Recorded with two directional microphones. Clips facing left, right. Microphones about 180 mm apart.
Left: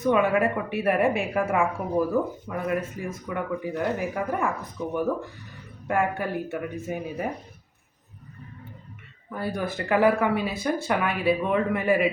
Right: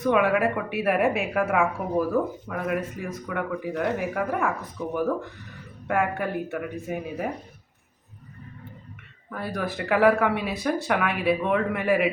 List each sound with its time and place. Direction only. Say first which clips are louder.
0.0 s speech: even; centre (ahead or behind)
9.4 s speech: left 1 dB; centre (ahead or behind)